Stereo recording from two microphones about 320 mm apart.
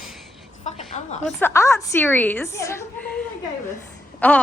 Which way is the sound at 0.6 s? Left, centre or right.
Left.